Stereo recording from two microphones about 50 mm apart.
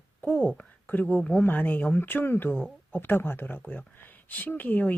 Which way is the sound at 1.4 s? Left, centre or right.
Left.